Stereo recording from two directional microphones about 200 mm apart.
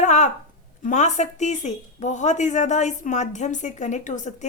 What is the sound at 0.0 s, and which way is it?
A woman's voice, 35° left (ahead or behind).